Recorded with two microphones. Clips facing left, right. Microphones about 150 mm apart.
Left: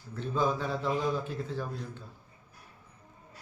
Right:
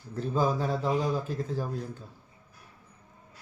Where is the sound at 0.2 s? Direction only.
40° right (ahead or behind).